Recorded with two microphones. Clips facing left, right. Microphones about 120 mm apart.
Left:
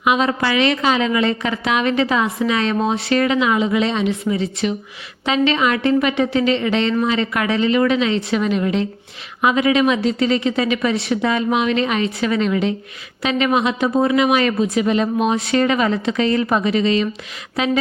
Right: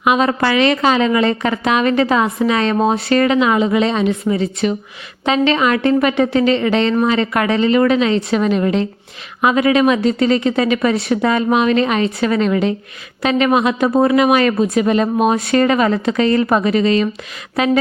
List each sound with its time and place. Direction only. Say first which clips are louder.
0.0 s a woman's voice: right 3 dB; 45° right (ahead or behind)